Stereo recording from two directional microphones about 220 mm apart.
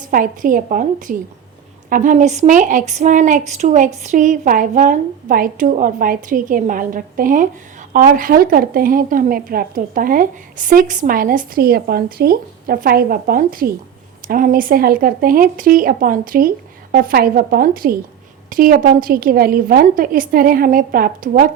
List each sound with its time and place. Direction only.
0.0 s a woman's voice: 40° right (ahead or behind)